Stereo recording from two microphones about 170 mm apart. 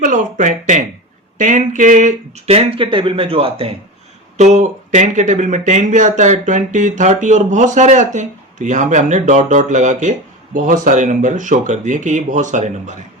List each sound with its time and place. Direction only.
0.0 s speech: 50° right (ahead or behind)